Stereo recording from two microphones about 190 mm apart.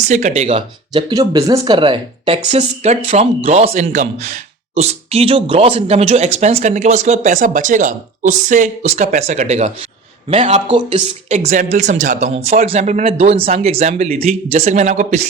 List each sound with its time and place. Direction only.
0.1 s speech: 40° right (ahead or behind)
1.1 s speech: 20° right (ahead or behind); by 15.3 s 40° right (ahead or behind)